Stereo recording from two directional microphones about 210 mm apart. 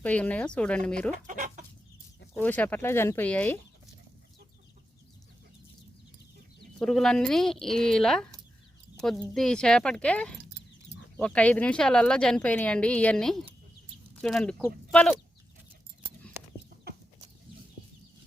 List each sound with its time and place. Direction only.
0.0 s speech: 5° left (ahead or behind)
1.1 s speech: 40° right (ahead or behind)
2.4 s speech: 5° left (ahead or behind)
6.6 s speech: centre (ahead or behind)